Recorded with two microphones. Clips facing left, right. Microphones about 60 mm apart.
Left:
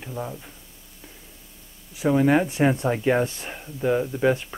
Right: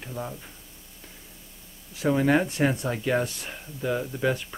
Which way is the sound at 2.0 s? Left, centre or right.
Centre.